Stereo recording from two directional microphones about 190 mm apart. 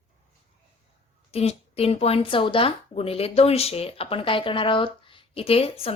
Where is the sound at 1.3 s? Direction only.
30° left (ahead or behind).